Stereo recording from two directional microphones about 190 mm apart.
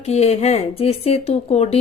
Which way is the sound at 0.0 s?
35° left (ahead or behind).